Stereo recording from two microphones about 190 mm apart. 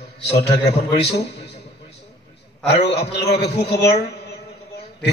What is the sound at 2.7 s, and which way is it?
A man's voice, 60° left (ahead or behind).